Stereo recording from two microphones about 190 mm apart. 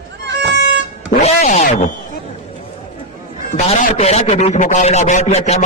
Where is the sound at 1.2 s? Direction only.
35° left (ahead or behind).